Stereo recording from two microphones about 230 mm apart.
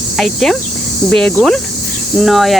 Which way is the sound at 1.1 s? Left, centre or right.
Centre.